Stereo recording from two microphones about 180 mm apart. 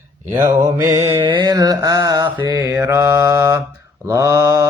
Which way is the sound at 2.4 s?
20° right (ahead or behind).